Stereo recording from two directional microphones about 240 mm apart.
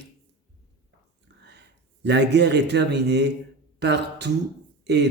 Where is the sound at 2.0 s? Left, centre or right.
Right.